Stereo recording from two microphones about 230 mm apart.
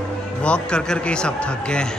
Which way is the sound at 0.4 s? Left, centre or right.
Centre.